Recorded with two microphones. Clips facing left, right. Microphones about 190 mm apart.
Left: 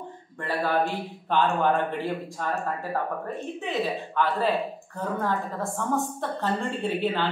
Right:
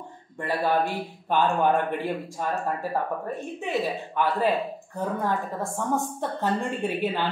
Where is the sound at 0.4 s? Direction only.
15° right (ahead or behind).